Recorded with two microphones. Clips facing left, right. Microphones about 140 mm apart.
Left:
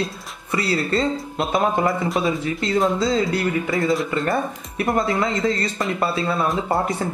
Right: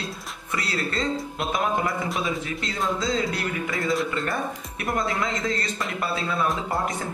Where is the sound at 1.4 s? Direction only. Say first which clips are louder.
Left 6 dB; 25° left (ahead or behind).